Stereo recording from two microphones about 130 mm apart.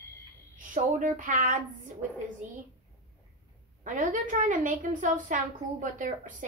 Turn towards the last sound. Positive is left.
turn(degrees=-80)